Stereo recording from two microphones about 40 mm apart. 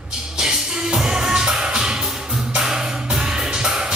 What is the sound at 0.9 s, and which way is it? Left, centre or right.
Music, centre.